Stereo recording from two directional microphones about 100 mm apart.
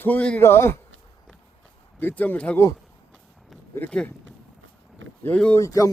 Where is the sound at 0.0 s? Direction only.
15° left (ahead or behind).